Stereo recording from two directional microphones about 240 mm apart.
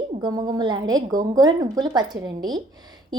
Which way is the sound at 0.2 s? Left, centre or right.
Centre.